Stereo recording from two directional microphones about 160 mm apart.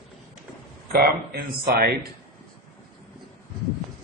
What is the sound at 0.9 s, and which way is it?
Speech, 70° right (ahead or behind).